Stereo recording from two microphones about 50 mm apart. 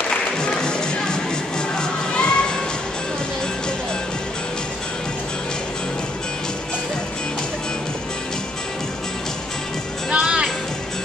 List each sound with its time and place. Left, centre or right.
0.1 s music: centre
1.8 s children shouting: centre
10.1 s music: centre